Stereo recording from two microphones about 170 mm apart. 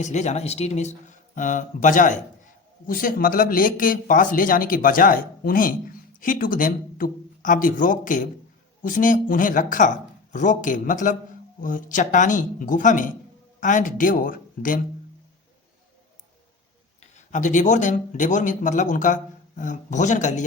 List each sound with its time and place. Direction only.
0.0 s speech: 45° left (ahead or behind)
17.0 s speech: 45° left (ahead or behind)